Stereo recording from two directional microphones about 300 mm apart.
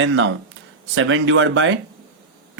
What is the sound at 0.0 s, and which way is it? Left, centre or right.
Speech, right.